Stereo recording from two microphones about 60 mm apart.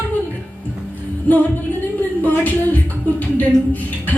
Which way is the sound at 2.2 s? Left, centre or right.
Left.